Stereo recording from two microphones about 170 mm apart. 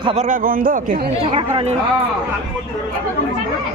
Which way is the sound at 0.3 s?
55° right (ahead or behind).